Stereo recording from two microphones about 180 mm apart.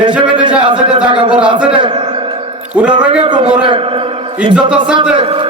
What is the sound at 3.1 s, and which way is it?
A man's voice, 30° right (ahead or behind).